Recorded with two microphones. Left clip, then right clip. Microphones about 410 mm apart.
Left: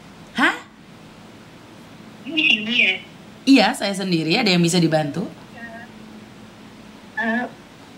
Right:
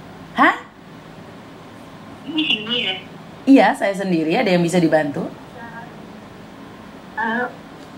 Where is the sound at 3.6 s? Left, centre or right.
Left.